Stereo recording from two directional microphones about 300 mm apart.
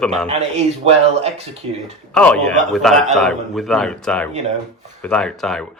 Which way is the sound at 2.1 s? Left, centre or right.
Centre.